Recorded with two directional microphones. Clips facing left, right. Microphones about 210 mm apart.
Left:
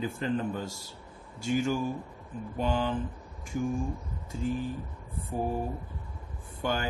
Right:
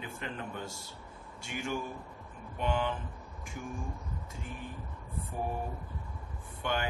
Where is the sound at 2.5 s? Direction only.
35° left (ahead or behind).